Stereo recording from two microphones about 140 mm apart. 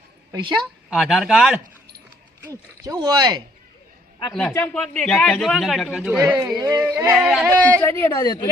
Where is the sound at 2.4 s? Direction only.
20° right (ahead or behind).